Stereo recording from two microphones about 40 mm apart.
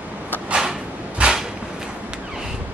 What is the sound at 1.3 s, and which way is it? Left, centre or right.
Cupboard open or close, centre.